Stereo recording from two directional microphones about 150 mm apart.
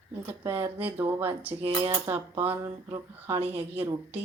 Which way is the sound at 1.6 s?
35° right (ahead or behind).